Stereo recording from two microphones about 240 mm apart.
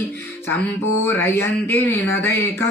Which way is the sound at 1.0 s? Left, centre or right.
Centre.